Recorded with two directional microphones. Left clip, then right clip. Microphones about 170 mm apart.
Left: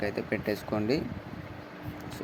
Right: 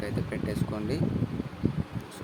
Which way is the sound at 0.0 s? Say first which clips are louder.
Left 3 dB; 15° left (ahead or behind).